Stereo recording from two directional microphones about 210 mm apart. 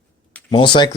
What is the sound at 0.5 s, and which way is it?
Speech, 25° left (ahead or behind).